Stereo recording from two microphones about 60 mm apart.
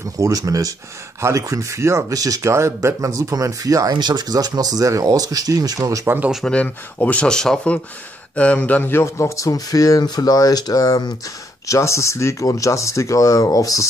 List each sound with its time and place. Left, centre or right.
0.2 s speech: right
1.2 s speech: right
2.5 s speech: right
6.4 s speech: left
7.2 s speech: centre
8.8 s speech: left
11.6 s speech: left
12.4 s speech: left